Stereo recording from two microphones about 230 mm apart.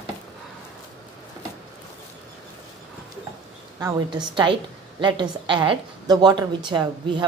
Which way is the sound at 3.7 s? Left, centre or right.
Centre.